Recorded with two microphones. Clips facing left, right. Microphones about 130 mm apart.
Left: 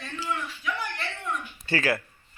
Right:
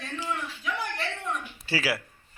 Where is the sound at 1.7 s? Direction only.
10° right (ahead or behind).